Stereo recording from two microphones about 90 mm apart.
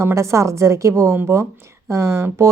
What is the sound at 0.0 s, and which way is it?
Speech, 30° right (ahead or behind).